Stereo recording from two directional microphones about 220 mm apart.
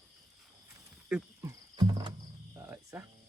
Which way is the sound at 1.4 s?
20° right (ahead or behind).